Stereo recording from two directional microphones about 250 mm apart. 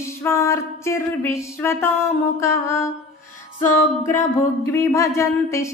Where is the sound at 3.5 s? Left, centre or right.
Left.